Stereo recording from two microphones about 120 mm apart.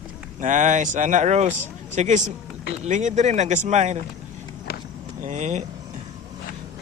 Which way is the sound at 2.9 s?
90° right.